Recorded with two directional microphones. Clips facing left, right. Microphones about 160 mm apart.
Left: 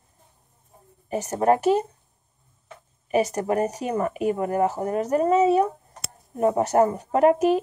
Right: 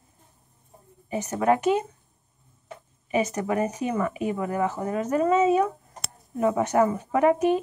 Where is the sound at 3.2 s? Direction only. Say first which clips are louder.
Left 2 dB; 40° left (ahead or behind).